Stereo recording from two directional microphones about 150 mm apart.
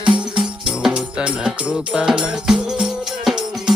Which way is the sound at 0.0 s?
35° right (ahead or behind).